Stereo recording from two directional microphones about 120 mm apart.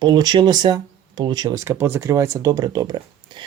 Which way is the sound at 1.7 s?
20° right (ahead or behind).